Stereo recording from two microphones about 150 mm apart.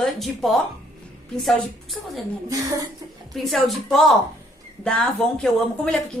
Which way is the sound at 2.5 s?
25° right (ahead or behind).